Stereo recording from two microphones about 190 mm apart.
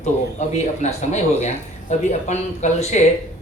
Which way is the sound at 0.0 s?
35° left (ahead or behind).